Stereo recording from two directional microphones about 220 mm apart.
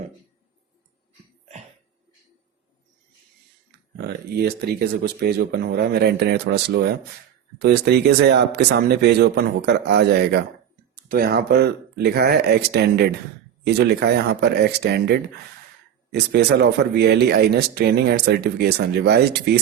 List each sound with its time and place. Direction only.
3.9 s speech: 45° right (ahead or behind)
16.1 s speech: 50° right (ahead or behind)